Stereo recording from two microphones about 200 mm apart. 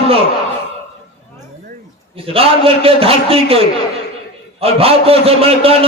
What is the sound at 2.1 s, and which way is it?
A man's voice, 30° right (ahead or behind).